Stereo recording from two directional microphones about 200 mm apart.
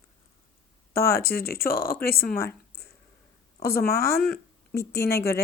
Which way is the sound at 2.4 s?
50° left (ahead or behind).